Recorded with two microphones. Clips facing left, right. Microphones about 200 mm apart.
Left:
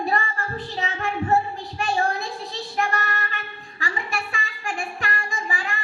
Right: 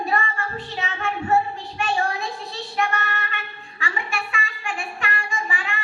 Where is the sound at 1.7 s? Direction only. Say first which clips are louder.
Left 1 dB; 35° left (ahead or behind).